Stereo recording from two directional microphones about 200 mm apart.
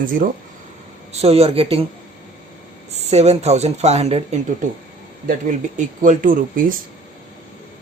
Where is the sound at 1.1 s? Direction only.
30° right (ahead or behind).